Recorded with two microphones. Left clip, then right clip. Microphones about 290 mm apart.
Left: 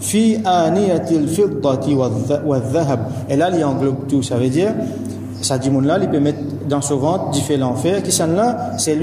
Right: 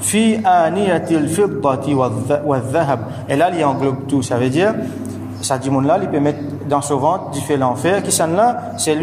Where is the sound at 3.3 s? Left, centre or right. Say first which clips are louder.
Right 1 dB; centre.